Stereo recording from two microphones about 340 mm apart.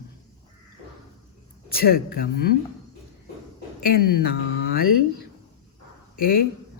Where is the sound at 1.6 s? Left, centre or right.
Left.